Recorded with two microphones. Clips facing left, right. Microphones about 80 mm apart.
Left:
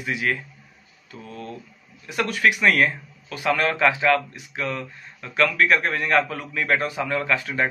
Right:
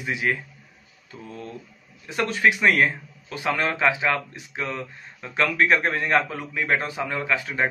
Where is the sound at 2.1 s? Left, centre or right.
Right.